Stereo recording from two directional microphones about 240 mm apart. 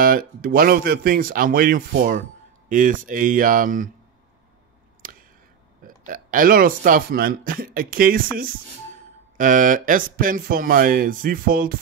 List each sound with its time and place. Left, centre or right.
0.0 s speech: right
5.0 s a sound: right
5.9 s speech: right